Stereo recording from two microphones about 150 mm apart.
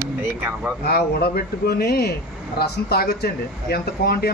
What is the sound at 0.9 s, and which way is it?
Speech, 90° left.